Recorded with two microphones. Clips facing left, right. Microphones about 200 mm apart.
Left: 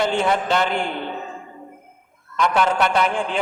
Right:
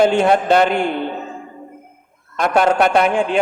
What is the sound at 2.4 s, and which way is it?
A man's voice, 50° right (ahead or behind).